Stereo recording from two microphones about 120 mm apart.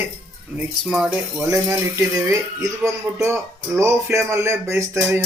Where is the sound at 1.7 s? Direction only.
25° right (ahead or behind).